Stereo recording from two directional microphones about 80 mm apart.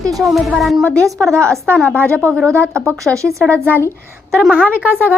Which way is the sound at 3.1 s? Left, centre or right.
Right.